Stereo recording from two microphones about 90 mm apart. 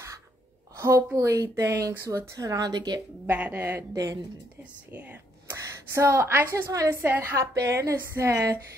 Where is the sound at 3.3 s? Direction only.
20° right (ahead or behind).